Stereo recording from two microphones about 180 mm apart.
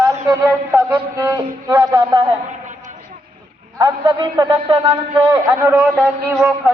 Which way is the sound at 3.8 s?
25° right (ahead or behind).